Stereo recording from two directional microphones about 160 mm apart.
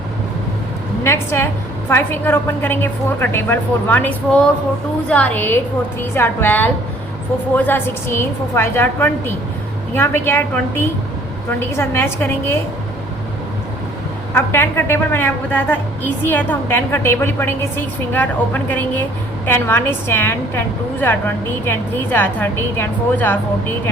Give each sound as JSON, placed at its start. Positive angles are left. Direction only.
{"t": 1.0, "sound": "a woman's voice", "side_deg": 15}
{"t": 14.3, "sound": "a woman's voice", "side_deg": 15}